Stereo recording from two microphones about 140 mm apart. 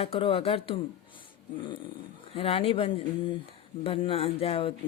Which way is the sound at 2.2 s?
40° left (ahead or behind).